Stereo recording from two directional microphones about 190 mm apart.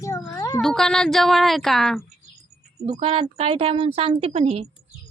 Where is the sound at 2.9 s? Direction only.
30° right (ahead or behind).